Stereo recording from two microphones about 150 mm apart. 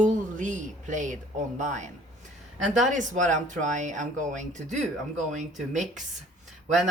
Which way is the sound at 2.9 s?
55° right (ahead or behind).